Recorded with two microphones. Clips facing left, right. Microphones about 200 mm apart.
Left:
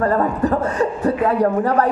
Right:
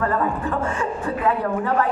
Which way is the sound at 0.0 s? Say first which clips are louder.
Left 5 dB; 40° left (ahead or behind).